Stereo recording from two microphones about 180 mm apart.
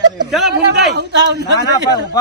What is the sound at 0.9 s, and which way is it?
Speech, 70° right (ahead or behind).